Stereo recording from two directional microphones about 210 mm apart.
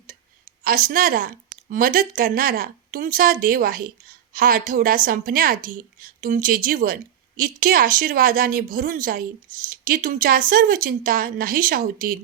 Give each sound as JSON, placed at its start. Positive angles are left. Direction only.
{"t": 0.6, "sound": "speech", "side_deg": -40}